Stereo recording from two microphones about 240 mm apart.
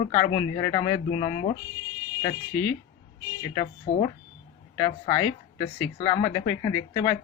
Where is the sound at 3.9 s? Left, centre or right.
Centre.